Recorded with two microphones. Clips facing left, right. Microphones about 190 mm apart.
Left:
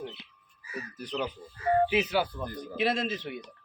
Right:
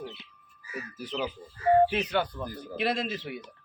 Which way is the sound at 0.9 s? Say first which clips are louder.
Even; 5° right (ahead or behind).